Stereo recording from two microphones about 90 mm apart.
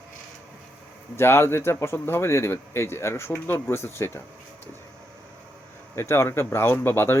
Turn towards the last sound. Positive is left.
turn(degrees=25)  # may be behind; listen again after turning